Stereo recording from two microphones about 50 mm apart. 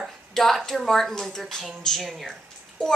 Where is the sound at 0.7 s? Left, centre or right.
Centre.